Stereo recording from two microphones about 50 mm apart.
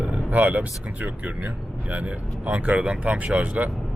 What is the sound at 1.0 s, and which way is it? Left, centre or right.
Speech, right.